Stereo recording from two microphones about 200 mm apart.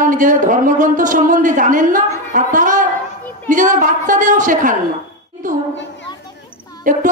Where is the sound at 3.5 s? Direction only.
40° right (ahead or behind).